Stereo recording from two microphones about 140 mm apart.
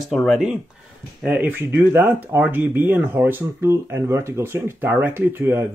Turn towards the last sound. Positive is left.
turn(degrees=-15)  # may be behind; listen again after turning